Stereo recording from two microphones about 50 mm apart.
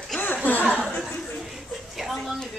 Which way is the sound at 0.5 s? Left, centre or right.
Left.